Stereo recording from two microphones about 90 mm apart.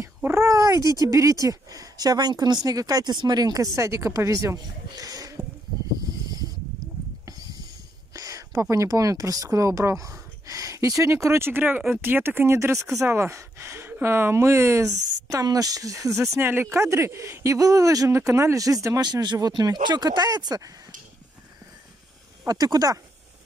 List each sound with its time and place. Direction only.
0.2 s speech: 30° right (ahead or behind)
8.1 s speech: 35° right (ahead or behind)
16.3 s speech: 25° right (ahead or behind)
18.9 s speech: 55° right (ahead or behind)
22.5 s speech: 45° right (ahead or behind)